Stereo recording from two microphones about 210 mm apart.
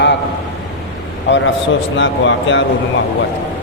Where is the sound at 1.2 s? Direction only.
60° left (ahead or behind).